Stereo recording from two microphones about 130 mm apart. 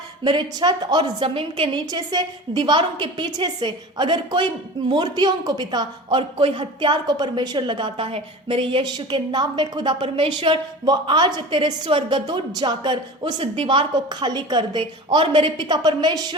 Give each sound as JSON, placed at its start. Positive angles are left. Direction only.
{"t": 0.3, "sound": "a woman's voice", "side_deg": -35}